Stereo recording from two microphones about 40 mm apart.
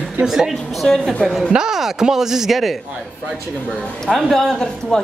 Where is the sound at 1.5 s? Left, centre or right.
Centre.